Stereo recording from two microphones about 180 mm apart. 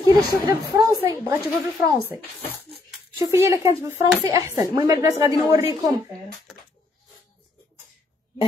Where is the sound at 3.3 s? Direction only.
15° right (ahead or behind).